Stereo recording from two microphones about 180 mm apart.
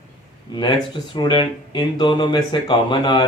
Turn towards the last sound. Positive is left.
turn(degrees=25)  # may be behind; listen again after turning